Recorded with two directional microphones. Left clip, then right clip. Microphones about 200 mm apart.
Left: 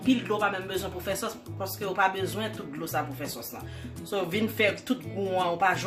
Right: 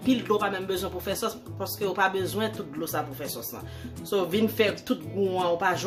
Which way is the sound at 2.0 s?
20° right (ahead or behind).